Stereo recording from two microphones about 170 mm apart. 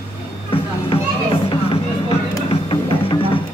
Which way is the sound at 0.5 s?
30° left (ahead or behind).